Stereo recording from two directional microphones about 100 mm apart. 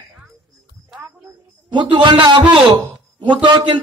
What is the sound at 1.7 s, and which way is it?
A man's voice, 50° right (ahead or behind).